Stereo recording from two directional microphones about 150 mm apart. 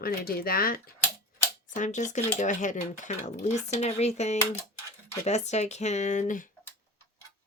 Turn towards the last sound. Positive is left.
turn(degrees=60)  # may be behind; listen again after turning